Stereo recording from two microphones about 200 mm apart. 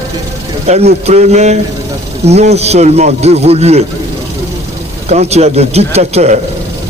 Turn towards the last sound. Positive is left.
turn(degrees=-30)  # may be behind; listen again after turning